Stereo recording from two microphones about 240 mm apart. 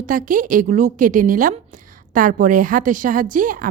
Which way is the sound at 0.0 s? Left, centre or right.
Right.